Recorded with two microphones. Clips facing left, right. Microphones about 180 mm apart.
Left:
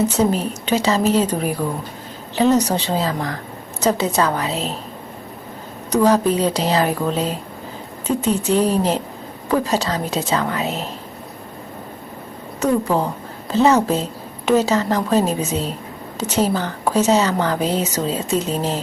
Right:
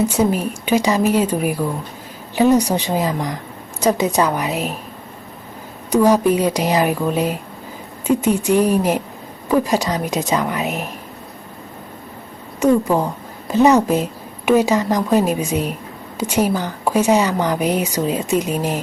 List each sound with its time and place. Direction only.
0.0 s a woman's voice: 10° right (ahead or behind)
5.9 s a woman's voice: 10° right (ahead or behind)
12.5 s a woman's voice: 10° right (ahead or behind)